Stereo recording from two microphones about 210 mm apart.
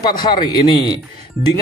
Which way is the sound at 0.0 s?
20° left (ahead or behind).